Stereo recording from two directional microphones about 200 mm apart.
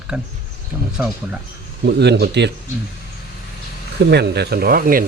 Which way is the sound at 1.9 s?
55° right (ahead or behind).